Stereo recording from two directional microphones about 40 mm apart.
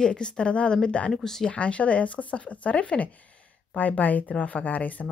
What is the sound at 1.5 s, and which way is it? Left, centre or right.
Speech, left.